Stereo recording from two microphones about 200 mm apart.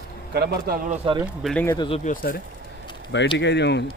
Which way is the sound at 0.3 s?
50° right (ahead or behind).